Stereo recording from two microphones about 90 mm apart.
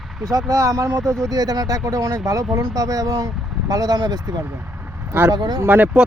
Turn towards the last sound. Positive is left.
turn(degrees=-20)  # may be behind; listen again after turning